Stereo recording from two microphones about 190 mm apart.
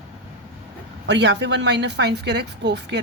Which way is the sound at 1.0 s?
65° right (ahead or behind).